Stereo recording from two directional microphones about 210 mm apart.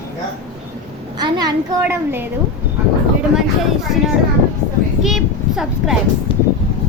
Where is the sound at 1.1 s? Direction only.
20° right (ahead or behind).